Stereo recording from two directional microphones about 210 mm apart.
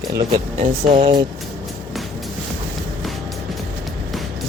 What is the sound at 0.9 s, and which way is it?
Speech, 30° right (ahead or behind).